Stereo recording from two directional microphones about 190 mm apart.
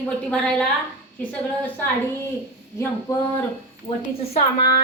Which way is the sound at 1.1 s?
10° left (ahead or behind).